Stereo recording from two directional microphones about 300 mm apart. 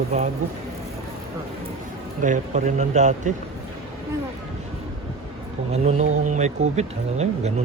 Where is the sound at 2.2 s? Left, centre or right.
Right.